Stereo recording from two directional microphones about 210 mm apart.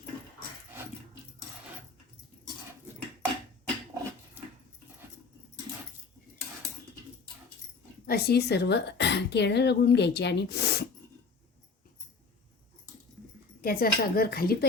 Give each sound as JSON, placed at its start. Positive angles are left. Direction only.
{"t": 8.0, "sound": "a woman's voice", "side_deg": 45}
{"t": 13.6, "sound": "a woman's voice", "side_deg": 45}